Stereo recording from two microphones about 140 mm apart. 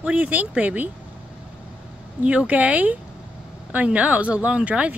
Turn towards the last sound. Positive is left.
turn(degrees=-10)  # may be behind; listen again after turning